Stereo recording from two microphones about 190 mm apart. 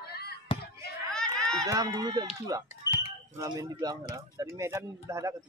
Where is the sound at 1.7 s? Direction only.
20° right (ahead or behind).